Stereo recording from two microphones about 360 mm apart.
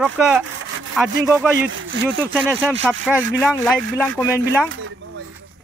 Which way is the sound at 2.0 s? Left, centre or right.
Centre.